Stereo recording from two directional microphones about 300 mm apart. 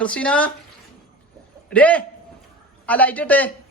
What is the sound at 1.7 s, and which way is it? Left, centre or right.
Speech, centre.